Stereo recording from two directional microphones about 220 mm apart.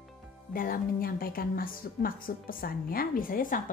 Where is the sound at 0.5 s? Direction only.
40° left (ahead or behind).